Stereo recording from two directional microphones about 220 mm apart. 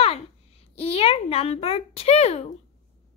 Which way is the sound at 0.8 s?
25° left (ahead or behind).